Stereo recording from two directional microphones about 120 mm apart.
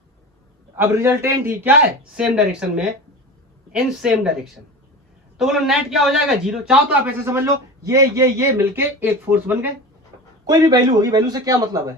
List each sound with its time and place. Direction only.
0.8 s a man's voice: 20° right (ahead or behind)
2.1 s a man's voice: 10° right (ahead or behind)
7.0 s a man's voice: 20° right (ahead or behind)
10.4 s a man's voice: 35° right (ahead or behind)